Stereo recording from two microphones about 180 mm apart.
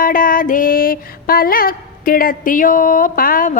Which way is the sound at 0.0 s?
50° left (ahead or behind).